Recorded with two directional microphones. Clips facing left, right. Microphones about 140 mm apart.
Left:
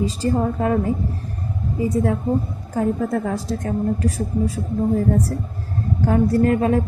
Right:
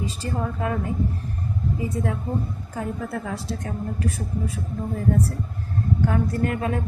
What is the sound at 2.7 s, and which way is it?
A woman's voice, 40° left (ahead or behind).